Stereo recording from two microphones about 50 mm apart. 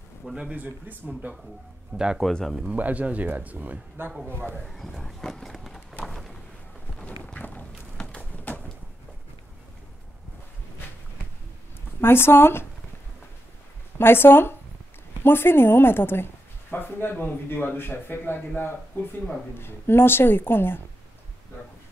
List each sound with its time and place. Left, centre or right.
0.2 s speech: centre
0.5 s speech: right
4.3 s speech: right
4.6 s a sound: centre
7.3 s a sound: left
12.0 s speech: left
13.9 s speech: left
19.6 s speech: left